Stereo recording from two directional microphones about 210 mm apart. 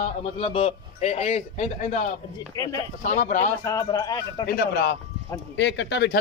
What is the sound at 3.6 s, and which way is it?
Speech, 15° left (ahead or behind).